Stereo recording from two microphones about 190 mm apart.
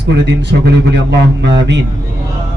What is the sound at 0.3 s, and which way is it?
Speech, 65° right (ahead or behind).